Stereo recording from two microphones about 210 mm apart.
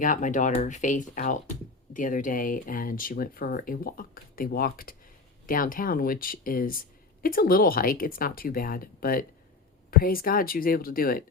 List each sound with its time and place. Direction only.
0.0 s speech: 40° left (ahead or behind)